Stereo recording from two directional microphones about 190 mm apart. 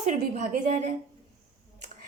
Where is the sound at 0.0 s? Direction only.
40° right (ahead or behind).